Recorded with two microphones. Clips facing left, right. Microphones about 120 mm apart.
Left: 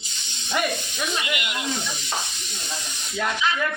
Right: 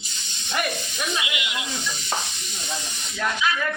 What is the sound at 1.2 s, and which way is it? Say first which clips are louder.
Speech: left 2 dB; 50° left (ahead or behind).